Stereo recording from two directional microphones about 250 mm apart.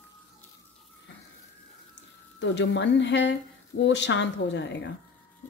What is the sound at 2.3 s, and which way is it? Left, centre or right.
A woman's voice, left.